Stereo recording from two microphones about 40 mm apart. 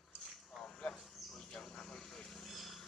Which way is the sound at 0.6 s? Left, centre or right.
Centre.